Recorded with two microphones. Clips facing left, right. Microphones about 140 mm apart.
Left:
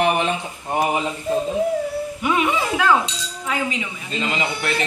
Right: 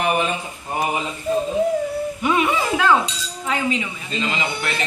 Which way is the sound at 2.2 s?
10° left (ahead or behind).